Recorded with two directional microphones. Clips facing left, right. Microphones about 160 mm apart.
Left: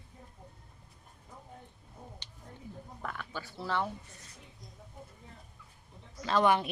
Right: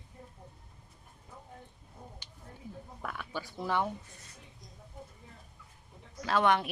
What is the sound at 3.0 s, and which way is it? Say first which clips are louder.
Speech: right 1 dB; 5° right (ahead or behind).